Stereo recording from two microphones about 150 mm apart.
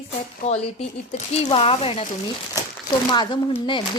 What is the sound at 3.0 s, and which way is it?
Speech, 30° left (ahead or behind).